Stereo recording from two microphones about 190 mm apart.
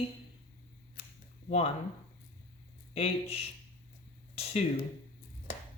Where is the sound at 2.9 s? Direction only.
30° left (ahead or behind).